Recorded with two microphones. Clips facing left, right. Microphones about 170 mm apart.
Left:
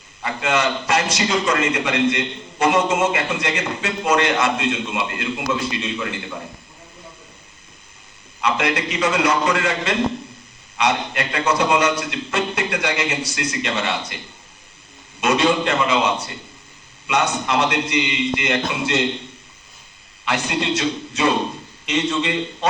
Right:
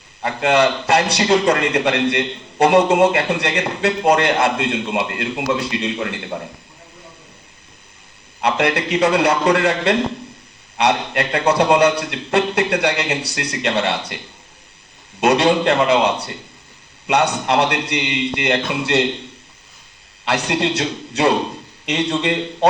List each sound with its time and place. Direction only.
0.2 s a man's voice: 55° right (ahead or behind)
8.4 s a man's voice: 60° right (ahead or behind)
15.2 s a man's voice: 65° right (ahead or behind)
20.2 s a man's voice: 65° right (ahead or behind)